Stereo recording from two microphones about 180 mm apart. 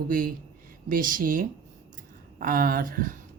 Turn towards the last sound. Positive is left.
turn(degrees=-50)  # may be behind; listen again after turning